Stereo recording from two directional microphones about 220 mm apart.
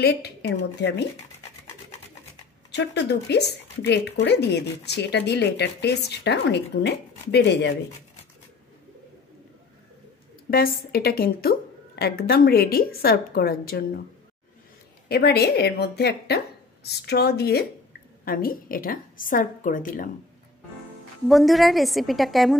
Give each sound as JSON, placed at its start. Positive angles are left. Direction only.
{"t": 0.0, "sound": "speech", "side_deg": 50}
{"t": 2.7, "sound": "speech", "side_deg": 50}
{"t": 10.5, "sound": "speech", "side_deg": 45}
{"t": 15.0, "sound": "a woman's voice", "side_deg": 45}
{"t": 21.3, "sound": "a woman's voice", "side_deg": 0}